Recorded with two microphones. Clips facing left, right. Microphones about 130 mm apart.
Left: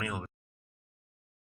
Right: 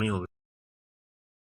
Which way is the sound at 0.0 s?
25° right (ahead or behind).